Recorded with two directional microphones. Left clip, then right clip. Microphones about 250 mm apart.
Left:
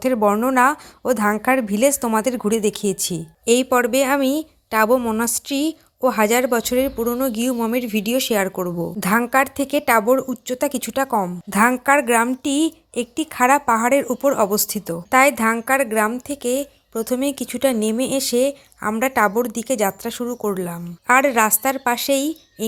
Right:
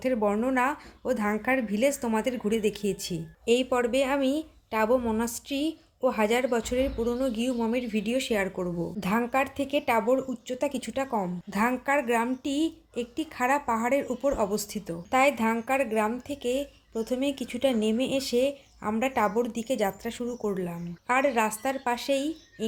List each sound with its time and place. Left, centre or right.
0.0 s a woman's voice: centre